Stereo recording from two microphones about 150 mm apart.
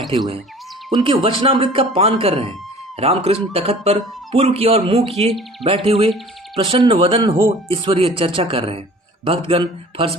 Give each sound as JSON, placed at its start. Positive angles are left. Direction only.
{"t": 0.1, "sound": "speech", "side_deg": -40}